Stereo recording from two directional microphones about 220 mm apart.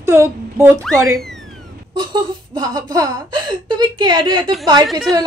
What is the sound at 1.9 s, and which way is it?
Speech, 20° right (ahead or behind).